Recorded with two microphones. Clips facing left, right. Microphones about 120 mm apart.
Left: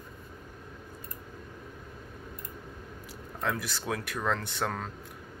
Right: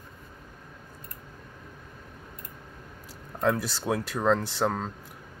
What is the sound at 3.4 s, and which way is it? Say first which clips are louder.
Speech: right 7 dB; 35° right (ahead or behind).